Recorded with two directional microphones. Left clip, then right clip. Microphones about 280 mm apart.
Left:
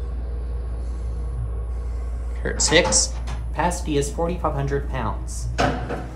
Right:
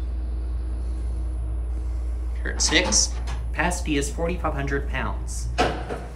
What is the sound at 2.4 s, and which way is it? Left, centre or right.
Speech, centre.